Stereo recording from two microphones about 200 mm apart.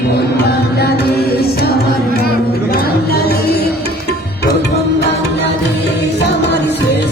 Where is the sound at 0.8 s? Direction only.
50° left (ahead or behind).